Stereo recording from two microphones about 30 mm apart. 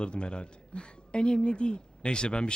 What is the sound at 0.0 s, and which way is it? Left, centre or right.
Speech, left.